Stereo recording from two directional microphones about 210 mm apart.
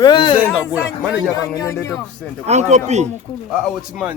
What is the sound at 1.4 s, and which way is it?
Speech, 15° left (ahead or behind).